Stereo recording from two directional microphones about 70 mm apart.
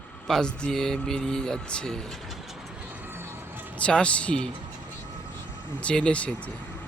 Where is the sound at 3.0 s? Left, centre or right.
Right.